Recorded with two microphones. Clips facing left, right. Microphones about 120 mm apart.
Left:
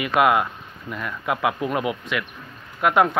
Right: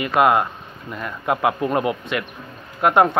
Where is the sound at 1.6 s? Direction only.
5° left (ahead or behind).